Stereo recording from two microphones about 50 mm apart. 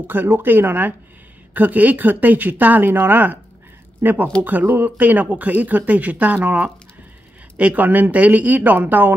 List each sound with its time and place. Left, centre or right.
0.0 s speech: right